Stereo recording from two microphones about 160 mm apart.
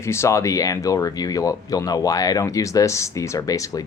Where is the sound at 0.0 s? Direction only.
15° left (ahead or behind).